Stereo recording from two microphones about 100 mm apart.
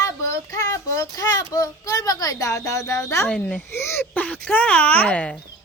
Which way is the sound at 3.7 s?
25° left (ahead or behind).